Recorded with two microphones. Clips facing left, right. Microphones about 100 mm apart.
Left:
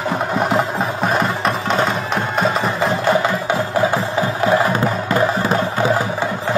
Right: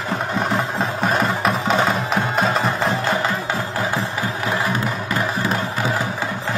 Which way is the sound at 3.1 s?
20° left (ahead or behind).